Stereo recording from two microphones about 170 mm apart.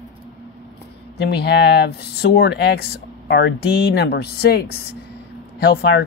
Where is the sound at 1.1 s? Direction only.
75° left (ahead or behind).